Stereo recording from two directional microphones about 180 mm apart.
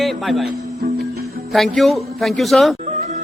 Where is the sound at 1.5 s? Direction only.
Centre (ahead or behind).